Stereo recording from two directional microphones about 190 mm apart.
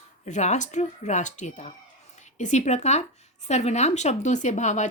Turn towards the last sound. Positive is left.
turn(degrees=40)  # may be behind; listen again after turning